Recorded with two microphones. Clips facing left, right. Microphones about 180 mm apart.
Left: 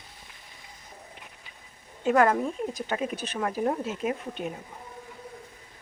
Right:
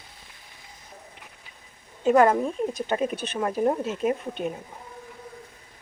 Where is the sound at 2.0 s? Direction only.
25° right (ahead or behind).